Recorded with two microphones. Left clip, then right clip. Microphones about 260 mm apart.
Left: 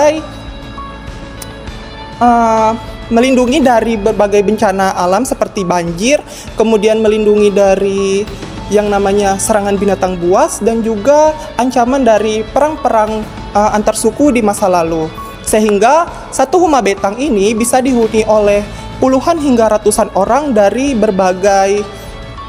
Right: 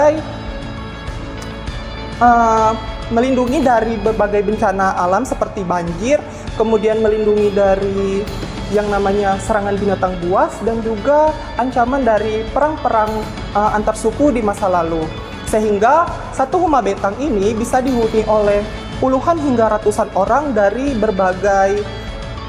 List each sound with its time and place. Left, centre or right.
2.1 s music: left
3.2 s a woman's voice: left